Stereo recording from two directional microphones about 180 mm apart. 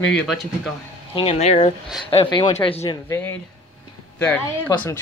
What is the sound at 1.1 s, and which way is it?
Speech, 35° left (ahead or behind).